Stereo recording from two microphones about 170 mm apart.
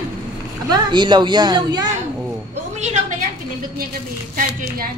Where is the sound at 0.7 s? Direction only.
25° right (ahead or behind).